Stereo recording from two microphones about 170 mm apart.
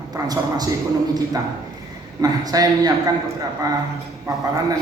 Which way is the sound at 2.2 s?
20° right (ahead or behind).